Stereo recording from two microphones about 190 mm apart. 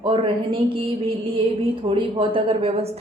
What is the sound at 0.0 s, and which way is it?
A woman's voice, 30° right (ahead or behind).